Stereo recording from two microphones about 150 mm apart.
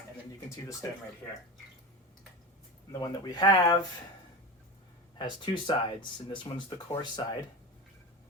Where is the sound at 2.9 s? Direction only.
25° left (ahead or behind).